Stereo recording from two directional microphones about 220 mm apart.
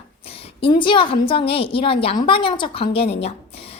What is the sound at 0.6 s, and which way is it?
A woman's voice, 20° left (ahead or behind).